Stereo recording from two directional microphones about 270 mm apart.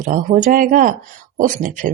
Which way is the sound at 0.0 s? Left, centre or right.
Right.